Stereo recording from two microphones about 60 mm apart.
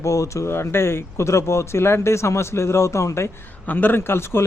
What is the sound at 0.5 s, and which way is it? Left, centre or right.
A man's voice, left.